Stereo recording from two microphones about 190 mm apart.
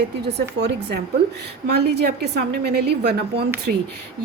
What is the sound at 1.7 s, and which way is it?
A woman's voice, 60° right (ahead or behind).